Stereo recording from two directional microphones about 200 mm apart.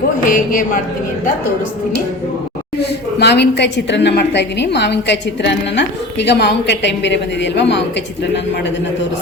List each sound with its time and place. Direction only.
0.3 s a woman's voice: 40° left (ahead or behind)
2.8 s a woman's voice: 55° left (ahead or behind)